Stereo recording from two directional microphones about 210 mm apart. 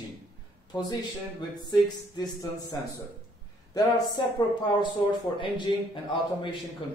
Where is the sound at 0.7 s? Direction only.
20° left (ahead or behind).